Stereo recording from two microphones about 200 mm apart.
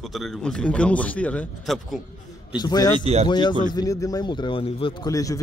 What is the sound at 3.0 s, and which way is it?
Speech, 30° right (ahead or behind).